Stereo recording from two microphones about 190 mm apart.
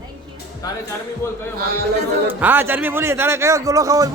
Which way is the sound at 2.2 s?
10° right (ahead or behind).